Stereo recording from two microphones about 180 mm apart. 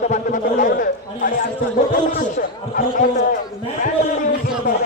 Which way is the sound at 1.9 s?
50° left (ahead or behind).